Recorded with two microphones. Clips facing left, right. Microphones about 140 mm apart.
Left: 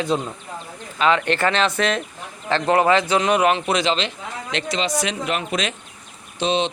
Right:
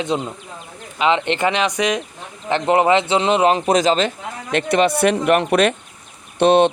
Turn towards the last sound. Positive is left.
turn(degrees=-60)  # may be behind; listen again after turning